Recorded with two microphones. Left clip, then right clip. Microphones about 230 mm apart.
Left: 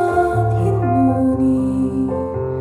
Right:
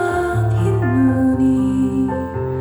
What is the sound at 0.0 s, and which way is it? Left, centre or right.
Music, centre.